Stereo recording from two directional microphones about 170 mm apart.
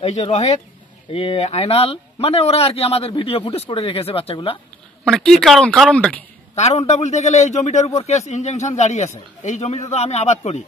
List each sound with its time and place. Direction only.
0.0 s a man's voice: 40° left (ahead or behind)
5.0 s speech: 5° left (ahead or behind)
6.5 s a man's voice: 40° left (ahead or behind)